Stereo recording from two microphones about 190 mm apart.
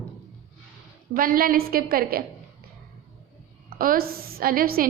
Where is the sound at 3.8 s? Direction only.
50° right (ahead or behind).